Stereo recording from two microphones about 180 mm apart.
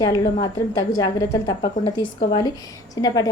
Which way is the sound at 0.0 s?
20° left (ahead or behind).